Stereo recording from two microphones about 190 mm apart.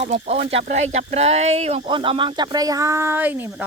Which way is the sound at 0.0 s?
35° right (ahead or behind).